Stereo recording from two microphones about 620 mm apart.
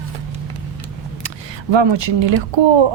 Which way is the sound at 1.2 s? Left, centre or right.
Right.